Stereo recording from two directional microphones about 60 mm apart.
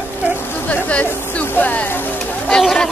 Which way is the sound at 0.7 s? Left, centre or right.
Left.